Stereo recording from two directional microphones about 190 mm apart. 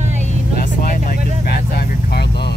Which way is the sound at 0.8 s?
50° left (ahead or behind).